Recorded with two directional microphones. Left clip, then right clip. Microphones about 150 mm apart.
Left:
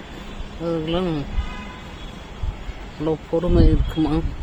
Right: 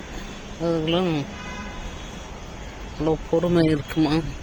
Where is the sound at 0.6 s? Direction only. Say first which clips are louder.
Right 1 dB; centre (ahead or behind).